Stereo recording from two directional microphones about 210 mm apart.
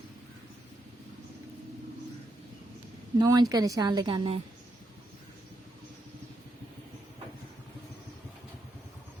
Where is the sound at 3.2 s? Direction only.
20° right (ahead or behind).